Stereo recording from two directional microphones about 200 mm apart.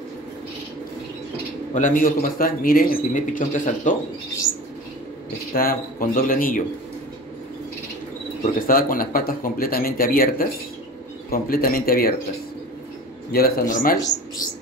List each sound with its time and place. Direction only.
1.7 s speech: 40° left (ahead or behind)
5.5 s speech: 45° left (ahead or behind)
8.5 s speech: 45° left (ahead or behind)
13.3 s speech: 50° left (ahead or behind)